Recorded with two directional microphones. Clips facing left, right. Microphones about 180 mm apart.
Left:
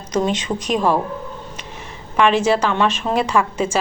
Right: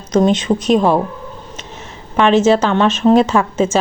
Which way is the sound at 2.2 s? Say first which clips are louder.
Right 5 dB; 25° right (ahead or behind).